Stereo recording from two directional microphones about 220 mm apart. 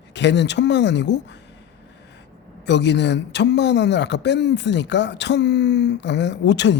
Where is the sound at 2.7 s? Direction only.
50° left (ahead or behind).